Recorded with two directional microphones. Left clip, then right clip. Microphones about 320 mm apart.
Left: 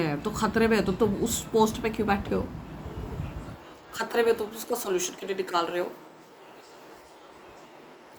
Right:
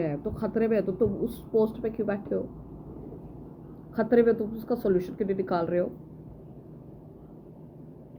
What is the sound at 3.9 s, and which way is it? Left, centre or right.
Speech, centre.